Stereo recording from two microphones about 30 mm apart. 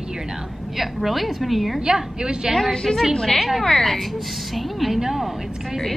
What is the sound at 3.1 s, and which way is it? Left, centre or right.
Speech, centre.